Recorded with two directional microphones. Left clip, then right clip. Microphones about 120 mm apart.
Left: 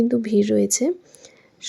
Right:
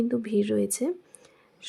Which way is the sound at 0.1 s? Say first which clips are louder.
Left 7 dB; 25° left (ahead or behind).